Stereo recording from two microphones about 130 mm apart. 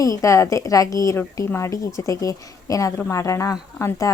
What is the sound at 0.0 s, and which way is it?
Speech, 25° left (ahead or behind).